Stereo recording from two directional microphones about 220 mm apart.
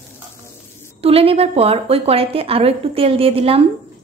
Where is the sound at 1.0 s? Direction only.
25° right (ahead or behind).